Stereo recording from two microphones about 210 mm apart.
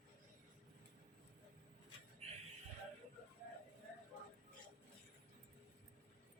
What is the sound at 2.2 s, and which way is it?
Music, 30° right (ahead or behind).